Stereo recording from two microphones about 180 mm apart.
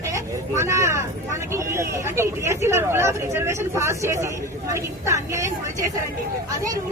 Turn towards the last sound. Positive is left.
turn(degrees=-15)  # may be behind; listen again after turning